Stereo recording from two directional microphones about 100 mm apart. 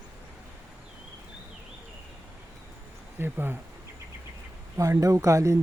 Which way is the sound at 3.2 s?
20° right (ahead or behind).